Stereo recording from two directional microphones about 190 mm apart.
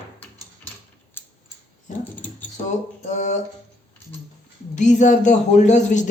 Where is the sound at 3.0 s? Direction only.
40° left (ahead or behind).